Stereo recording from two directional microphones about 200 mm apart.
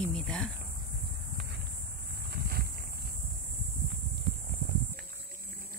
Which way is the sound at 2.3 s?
50° right (ahead or behind).